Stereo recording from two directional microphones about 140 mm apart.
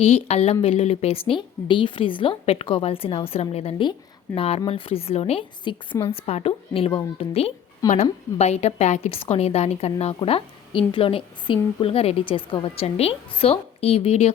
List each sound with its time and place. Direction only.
0.0 s a woman's voice: 50° left (ahead or behind)
7.8 s a woman's voice: 25° left (ahead or behind)
8.4 s a woman's voice: 50° left (ahead or behind)